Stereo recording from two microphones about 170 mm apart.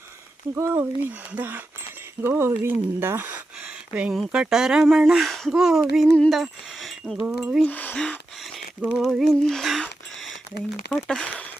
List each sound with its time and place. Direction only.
0.5 s speech: 15° right (ahead or behind)
6.0 s a sound: centre (ahead or behind)
7.3 s speech: 5° right (ahead or behind)
7.7 s gasp: 10° left (ahead or behind)
9.0 s a sound: centre (ahead or behind)
10.5 s speech: 65° left (ahead or behind)
10.9 s speech: 5° left (ahead or behind)